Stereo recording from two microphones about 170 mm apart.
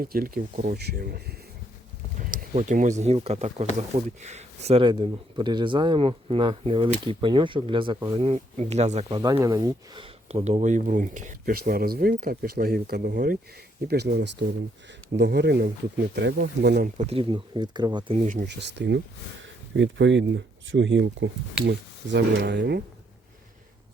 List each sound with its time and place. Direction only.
0.0 s speech: 60° right (ahead or behind)
2.2 s a sound: 55° right (ahead or behind)
3.0 s speech: 35° right (ahead or behind)
9.0 s speech: 25° right (ahead or behind); by 13.4 s 55° right (ahead or behind)
13.8 s speech: 70° right (ahead or behind)
17.1 s speech: 30° right (ahead or behind)
18.1 s speech: 45° right (ahead or behind)
18.4 s speech: 90° right